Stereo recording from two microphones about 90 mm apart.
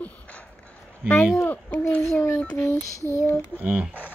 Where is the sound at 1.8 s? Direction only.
25° left (ahead or behind).